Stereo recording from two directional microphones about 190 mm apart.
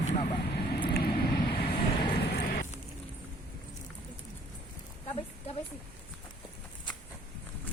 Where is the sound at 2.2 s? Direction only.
55° left (ahead or behind).